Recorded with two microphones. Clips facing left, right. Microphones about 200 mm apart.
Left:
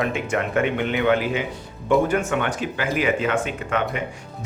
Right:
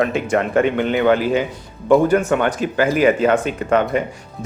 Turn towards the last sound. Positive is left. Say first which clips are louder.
# right 7 dB
turn(degrees=-40)  # may be behind; listen again after turning